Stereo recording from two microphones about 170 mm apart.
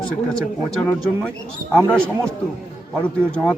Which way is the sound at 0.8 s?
5° left (ahead or behind).